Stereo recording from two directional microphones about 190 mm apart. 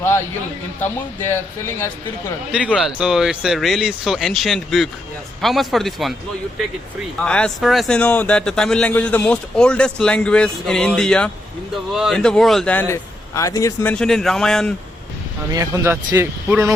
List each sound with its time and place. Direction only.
1.3 s speech: 10° left (ahead or behind)
2.5 s speech: 5° right (ahead or behind)
7.2 s speech: 5° left (ahead or behind)
13.9 s speech: 5° left (ahead or behind)
15.5 s speech: 15° right (ahead or behind)